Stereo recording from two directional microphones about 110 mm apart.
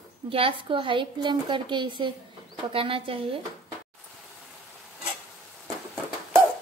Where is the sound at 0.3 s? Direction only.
55° right (ahead or behind).